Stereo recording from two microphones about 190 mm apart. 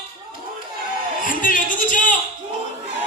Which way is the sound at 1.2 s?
45° left (ahead or behind).